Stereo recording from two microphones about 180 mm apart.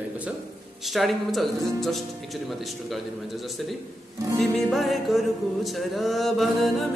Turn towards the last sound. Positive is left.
turn(degrees=0)  # may be behind; listen again after turning